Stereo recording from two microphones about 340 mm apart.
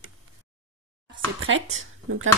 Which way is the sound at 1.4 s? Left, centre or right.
Right.